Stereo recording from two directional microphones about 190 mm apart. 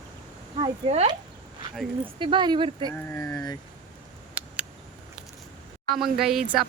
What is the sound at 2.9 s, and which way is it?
Speech, 10° left (ahead or behind).